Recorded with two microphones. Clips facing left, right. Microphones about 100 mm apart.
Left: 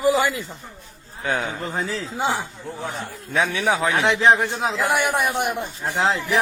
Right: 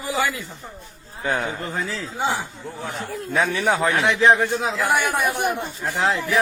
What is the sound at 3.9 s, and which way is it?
A man's voice, 20° left (ahead or behind).